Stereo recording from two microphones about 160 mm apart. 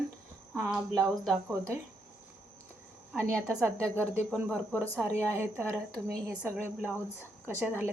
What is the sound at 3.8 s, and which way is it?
Speech, 10° left (ahead or behind).